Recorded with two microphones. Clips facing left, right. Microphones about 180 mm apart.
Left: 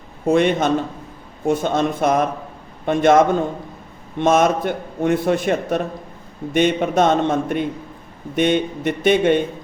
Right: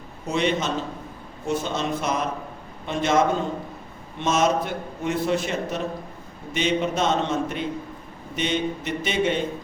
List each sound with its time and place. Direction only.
0.3 s a man's voice: 55° left (ahead or behind)
4.2 s a man's voice: 55° left (ahead or behind)